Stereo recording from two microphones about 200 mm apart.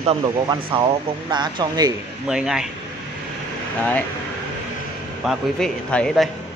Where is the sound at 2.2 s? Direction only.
5° right (ahead or behind).